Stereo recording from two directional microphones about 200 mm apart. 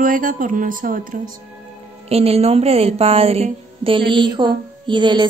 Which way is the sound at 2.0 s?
30° right (ahead or behind).